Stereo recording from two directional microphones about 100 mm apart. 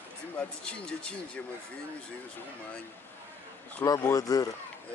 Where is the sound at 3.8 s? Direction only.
25° left (ahead or behind).